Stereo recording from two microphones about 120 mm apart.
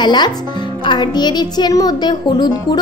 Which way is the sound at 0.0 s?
35° left (ahead or behind).